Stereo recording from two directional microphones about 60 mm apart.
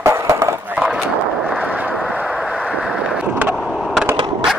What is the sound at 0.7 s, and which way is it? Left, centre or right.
Clip-clop, centre.